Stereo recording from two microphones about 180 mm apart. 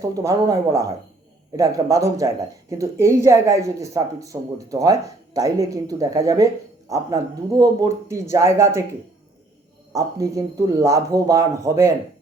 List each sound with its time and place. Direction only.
0.0 s speech: 20° right (ahead or behind)
9.9 s speech: 20° right (ahead or behind)